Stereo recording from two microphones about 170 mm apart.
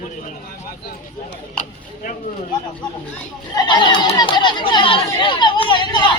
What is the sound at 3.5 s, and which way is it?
Speech, 25° left (ahead or behind).